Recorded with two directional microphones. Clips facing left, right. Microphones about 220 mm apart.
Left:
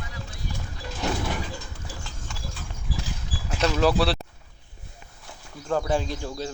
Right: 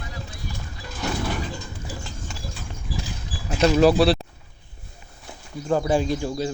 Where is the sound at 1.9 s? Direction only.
5° right (ahead or behind).